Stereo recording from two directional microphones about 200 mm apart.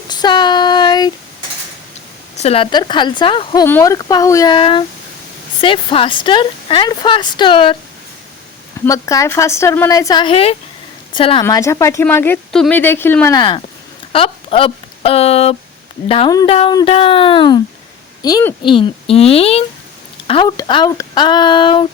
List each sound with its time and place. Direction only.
0.1 s child singing: 20° left (ahead or behind)
2.4 s speech: 30° left (ahead or behind)
8.8 s a woman's voice: 15° left (ahead or behind)
11.4 s speech: 15° left (ahead or behind)